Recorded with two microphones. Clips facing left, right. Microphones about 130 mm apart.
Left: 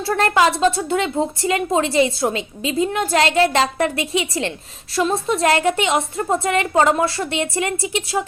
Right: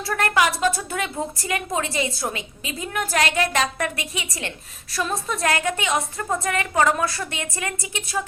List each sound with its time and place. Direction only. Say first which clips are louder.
0.0 s a woman's voice: left 5 dB; 30° left (ahead or behind)